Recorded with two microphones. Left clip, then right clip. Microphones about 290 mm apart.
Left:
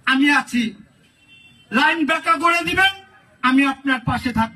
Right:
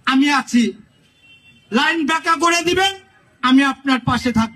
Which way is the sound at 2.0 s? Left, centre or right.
Right.